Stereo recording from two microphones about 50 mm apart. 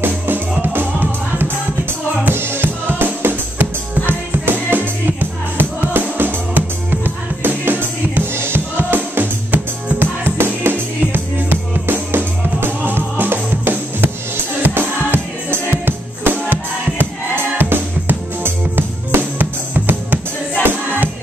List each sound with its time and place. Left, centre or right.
0.0 s music: right